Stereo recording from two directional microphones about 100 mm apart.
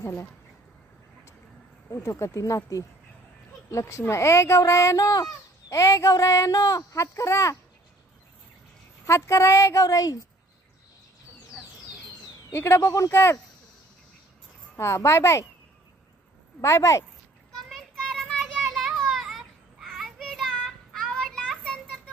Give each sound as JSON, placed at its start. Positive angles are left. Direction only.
{"t": 0.0, "sound": "speech", "side_deg": 25}
{"t": 2.0, "sound": "speech", "side_deg": 30}
{"t": 9.0, "sound": "speech", "side_deg": 30}
{"t": 12.5, "sound": "speech", "side_deg": 25}
{"t": 14.8, "sound": "speech", "side_deg": 25}
{"t": 16.6, "sound": "speech", "side_deg": 30}
{"t": 17.5, "sound": "children playing", "side_deg": 0}